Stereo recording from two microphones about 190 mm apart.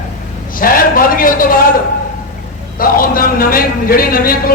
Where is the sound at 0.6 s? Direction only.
50° left (ahead or behind).